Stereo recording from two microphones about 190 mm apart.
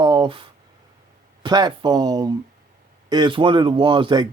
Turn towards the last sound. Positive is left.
turn(degrees=-25)  # may be behind; listen again after turning